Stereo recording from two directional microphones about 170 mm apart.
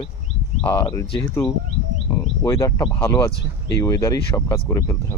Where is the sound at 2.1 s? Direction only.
15° left (ahead or behind).